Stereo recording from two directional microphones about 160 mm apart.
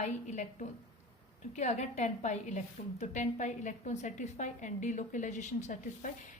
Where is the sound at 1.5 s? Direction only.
45° left (ahead or behind).